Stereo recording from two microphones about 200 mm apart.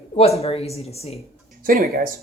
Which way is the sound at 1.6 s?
45° right (ahead or behind).